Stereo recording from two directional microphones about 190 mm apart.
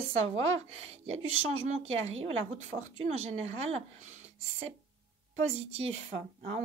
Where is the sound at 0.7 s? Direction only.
30° right (ahead or behind).